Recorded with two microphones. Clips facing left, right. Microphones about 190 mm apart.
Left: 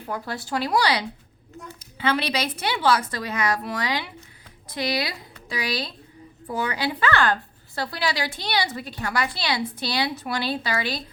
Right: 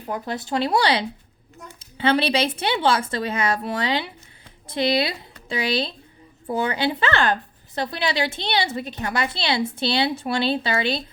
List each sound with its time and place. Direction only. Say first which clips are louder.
0.0 s a woman's voice: right 3 dB; 20° right (ahead or behind)